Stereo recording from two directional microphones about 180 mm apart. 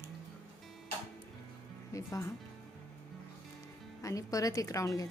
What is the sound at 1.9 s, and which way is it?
Speech, 15° left (ahead or behind).